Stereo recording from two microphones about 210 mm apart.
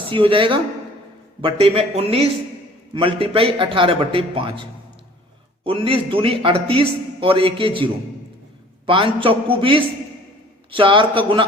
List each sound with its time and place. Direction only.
0.1 s a man's voice: 25° right (ahead or behind)
5.6 s a man's voice: 25° right (ahead or behind)
8.9 s a man's voice: 25° right (ahead or behind)